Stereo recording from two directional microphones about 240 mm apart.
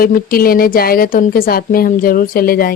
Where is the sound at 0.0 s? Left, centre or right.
Left.